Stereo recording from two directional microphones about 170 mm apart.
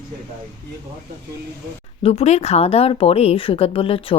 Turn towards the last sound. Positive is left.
turn(degrees=35)  # may be behind; listen again after turning